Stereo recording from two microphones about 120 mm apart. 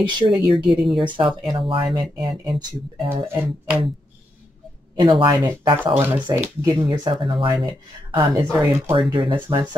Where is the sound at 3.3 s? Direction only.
20° right (ahead or behind).